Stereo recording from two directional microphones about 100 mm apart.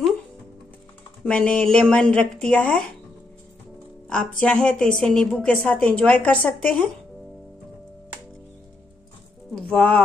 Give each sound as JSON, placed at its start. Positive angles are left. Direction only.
{"t": 1.2, "sound": "a woman's voice", "side_deg": 10}
{"t": 4.1, "sound": "a woman's voice", "side_deg": 10}
{"t": 9.6, "sound": "speech", "side_deg": 10}